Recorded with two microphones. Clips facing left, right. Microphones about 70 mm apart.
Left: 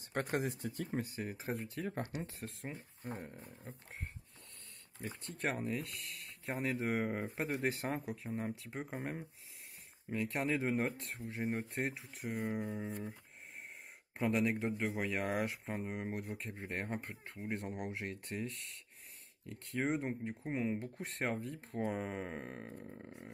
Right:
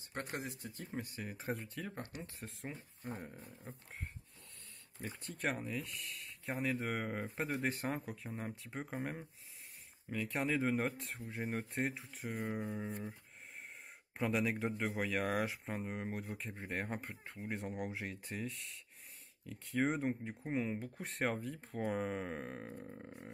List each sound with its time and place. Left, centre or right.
0.4 s speech: left
1.3 s speech: centre
2.7 s speech: left
5.0 s speech: centre
6.9 s speech: centre
8.2 s speech: centre
14.1 s speech: centre